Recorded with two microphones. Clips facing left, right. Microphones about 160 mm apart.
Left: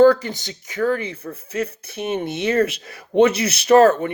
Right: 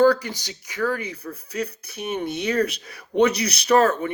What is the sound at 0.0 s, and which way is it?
Speech, 25° left (ahead or behind).